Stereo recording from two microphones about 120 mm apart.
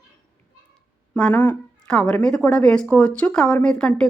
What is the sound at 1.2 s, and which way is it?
A woman's voice, 10° left (ahead or behind).